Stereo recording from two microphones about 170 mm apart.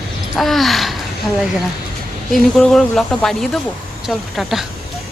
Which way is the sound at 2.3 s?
Centre (ahead or behind).